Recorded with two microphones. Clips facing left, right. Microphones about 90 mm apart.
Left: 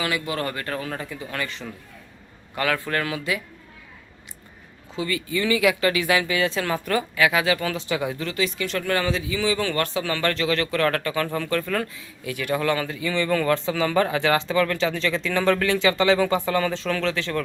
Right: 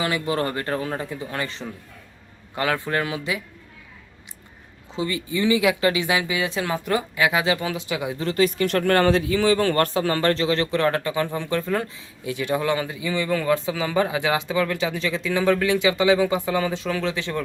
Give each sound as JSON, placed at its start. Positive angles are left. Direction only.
{"t": 0.0, "sound": "speech", "side_deg": -30}
{"t": 4.9, "sound": "speech", "side_deg": -25}
{"t": 8.2, "sound": "speech", "side_deg": -40}